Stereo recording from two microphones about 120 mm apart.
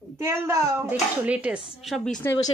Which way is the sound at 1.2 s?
10° right (ahead or behind).